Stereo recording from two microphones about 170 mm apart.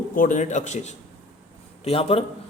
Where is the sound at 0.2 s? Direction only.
50° left (ahead or behind).